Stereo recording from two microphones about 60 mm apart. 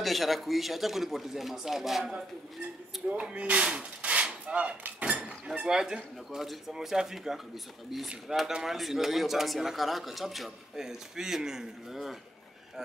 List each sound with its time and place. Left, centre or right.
0.0 s speech: centre
3.1 s a sound: centre
6.4 s speech: centre
8.5 s speech: centre